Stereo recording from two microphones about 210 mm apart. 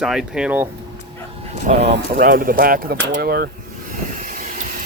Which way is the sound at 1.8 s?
50° right (ahead or behind).